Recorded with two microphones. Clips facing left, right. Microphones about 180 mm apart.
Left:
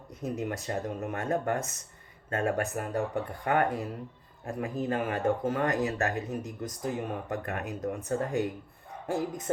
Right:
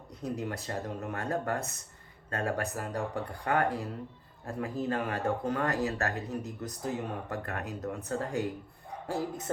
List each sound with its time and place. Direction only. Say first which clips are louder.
0.1 s speech: left 2 dB; 20° left (ahead or behind)